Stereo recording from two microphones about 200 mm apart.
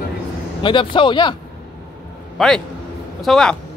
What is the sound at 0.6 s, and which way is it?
Speech, 25° left (ahead or behind).